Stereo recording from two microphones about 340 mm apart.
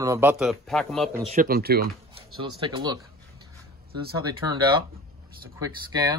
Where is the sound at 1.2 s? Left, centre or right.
Right.